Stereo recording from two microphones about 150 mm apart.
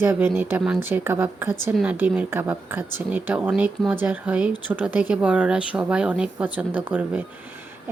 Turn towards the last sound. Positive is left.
turn(degrees=-10)  # may be behind; listen again after turning